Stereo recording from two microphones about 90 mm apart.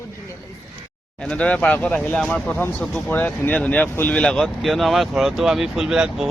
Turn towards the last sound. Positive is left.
turn(degrees=-5)  # may be behind; listen again after turning